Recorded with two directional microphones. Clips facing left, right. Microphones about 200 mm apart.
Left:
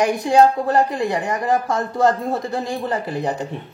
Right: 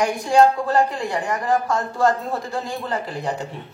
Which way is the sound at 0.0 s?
20° left (ahead or behind).